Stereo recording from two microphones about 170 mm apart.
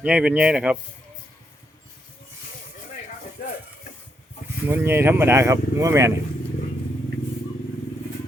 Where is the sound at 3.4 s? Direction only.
55° left (ahead or behind).